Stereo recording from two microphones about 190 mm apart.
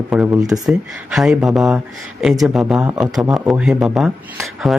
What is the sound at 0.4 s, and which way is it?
Speech, 20° right (ahead or behind).